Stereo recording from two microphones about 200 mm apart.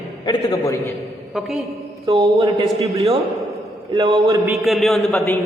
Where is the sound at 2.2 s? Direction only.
25° right (ahead or behind).